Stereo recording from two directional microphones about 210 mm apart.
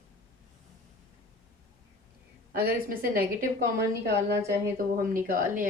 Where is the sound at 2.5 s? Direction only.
45° right (ahead or behind).